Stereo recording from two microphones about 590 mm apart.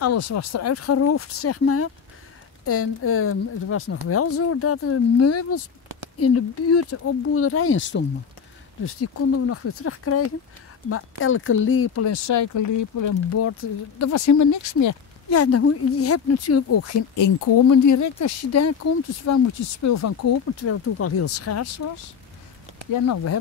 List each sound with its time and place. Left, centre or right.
0.0 s speech: left
22.9 s speech: left